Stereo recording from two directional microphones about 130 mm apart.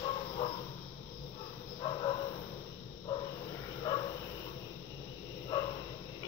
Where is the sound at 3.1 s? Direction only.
35° left (ahead or behind).